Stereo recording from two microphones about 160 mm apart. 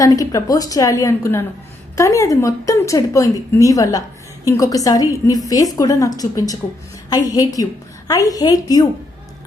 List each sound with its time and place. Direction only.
0.0 s a woman's voice: 20° left (ahead or behind)